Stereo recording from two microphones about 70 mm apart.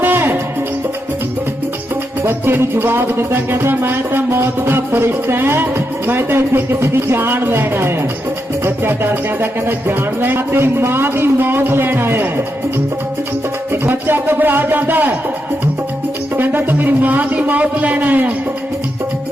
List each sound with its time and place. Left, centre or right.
0.0 s music: right
2.2 s music: right
13.8 s a man's voice: right
16.4 s a man's voice: right